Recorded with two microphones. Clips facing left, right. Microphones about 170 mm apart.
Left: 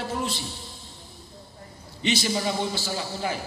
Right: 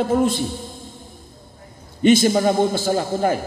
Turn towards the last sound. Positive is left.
turn(degrees=-50)  # may be behind; listen again after turning